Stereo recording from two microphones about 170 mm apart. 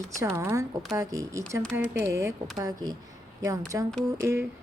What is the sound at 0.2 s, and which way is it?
A woman's voice, 15° right (ahead or behind).